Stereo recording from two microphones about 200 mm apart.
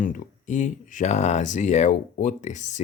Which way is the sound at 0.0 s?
40° left (ahead or behind).